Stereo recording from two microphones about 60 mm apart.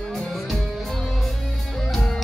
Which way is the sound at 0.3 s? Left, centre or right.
Centre.